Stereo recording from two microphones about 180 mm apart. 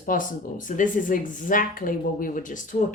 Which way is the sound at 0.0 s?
50° left (ahead or behind).